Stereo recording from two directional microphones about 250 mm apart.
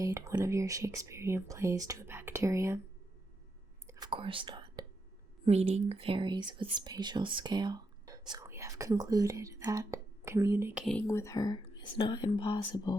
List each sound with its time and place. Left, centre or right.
0.0 s speech: centre
3.8 s whispering: centre
5.5 s speech: right; by 10.8 s centre
10.8 s speech: centre